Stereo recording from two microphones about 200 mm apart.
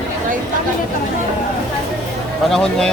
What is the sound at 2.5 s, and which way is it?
Speech, 5° left (ahead or behind).